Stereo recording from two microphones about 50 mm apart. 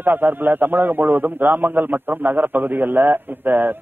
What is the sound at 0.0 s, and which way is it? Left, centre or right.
A man's voice, right.